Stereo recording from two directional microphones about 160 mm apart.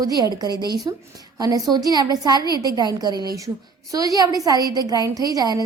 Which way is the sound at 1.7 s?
25° right (ahead or behind).